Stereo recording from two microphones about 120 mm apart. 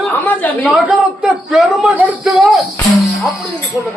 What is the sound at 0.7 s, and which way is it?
A man's voice, 5° right (ahead or behind).